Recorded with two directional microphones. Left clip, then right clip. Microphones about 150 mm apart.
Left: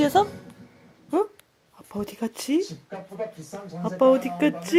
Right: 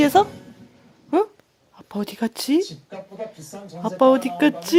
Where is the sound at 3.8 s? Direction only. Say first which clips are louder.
Right 3 dB; 20° right (ahead or behind).